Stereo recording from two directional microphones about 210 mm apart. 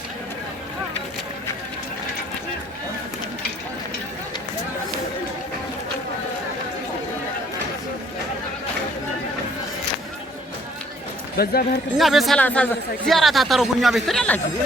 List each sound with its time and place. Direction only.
11.4 s a man's voice: 50° left (ahead or behind)
11.9 s speech: centre (ahead or behind)